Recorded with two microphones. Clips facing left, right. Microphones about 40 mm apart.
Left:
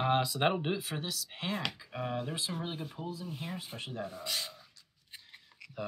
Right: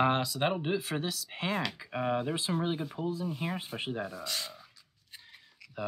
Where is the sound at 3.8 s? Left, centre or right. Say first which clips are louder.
Right 3 dB; right.